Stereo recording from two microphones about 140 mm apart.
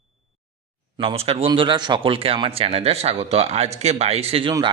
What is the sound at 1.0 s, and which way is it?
A man's voice, 45° right (ahead or behind).